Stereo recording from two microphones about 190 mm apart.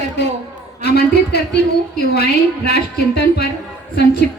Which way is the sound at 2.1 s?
60° left (ahead or behind).